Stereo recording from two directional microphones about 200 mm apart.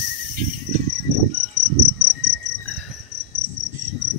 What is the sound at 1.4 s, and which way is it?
Cricket, 35° right (ahead or behind).